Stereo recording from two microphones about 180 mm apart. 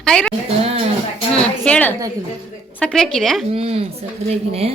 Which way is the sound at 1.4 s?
5° left (ahead or behind).